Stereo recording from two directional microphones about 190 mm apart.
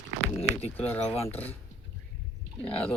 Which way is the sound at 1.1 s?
30° left (ahead or behind).